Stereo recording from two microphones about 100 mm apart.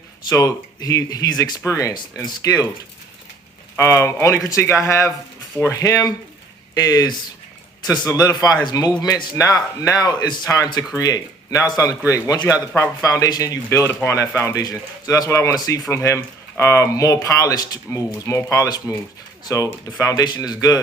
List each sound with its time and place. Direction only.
0.3 s speech: 35° left (ahead or behind)
3.8 s speech: 30° left (ahead or behind)
18.3 s speech: 30° left (ahead or behind)